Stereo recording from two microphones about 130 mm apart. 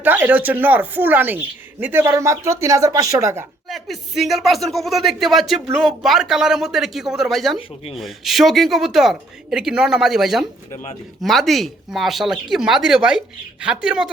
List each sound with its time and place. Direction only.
0.0 s speech: 15° right (ahead or behind)
3.7 s speech: centre (ahead or behind)